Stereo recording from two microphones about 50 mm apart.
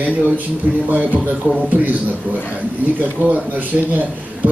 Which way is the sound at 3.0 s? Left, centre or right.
Right.